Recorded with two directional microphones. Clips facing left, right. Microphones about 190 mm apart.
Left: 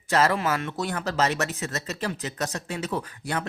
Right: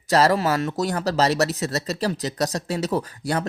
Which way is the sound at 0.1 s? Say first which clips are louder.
Right 4 dB; 35° right (ahead or behind).